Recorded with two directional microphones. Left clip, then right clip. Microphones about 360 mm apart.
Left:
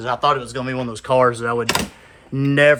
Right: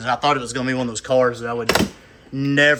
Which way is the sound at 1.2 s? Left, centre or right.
Left.